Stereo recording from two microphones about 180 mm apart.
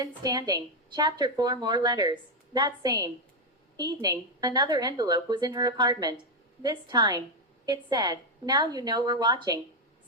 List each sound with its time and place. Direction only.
0.2 s a woman's voice: 20° right (ahead or behind)